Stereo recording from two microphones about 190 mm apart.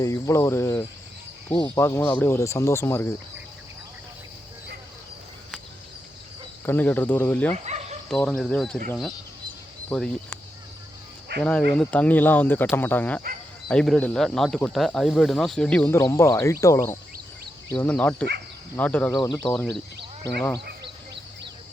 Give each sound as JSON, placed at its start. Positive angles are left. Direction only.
{"t": 0.0, "sound": "speech", "side_deg": 15}
{"t": 6.7, "sound": "speech", "side_deg": 10}
{"t": 7.5, "sound": "dog", "side_deg": -35}
{"t": 8.1, "sound": "speech", "side_deg": 5}
{"t": 9.9, "sound": "speech", "side_deg": 5}
{"t": 11.3, "sound": "speech", "side_deg": -65}
{"t": 11.7, "sound": "speech", "side_deg": 5}
{"t": 16.0, "sound": "speech", "side_deg": 15}